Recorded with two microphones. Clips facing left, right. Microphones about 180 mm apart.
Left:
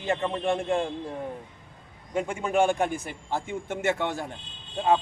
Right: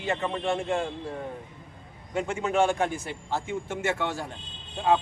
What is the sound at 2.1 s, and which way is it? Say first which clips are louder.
A man's voice: left 1 dB; 10° left (ahead or behind).